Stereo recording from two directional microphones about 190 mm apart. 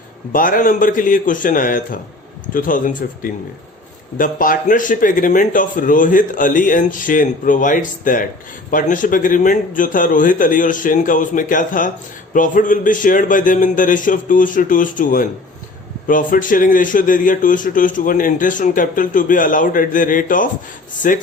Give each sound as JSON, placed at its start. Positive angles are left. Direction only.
{"t": 0.3, "sound": "a man's voice", "side_deg": 45}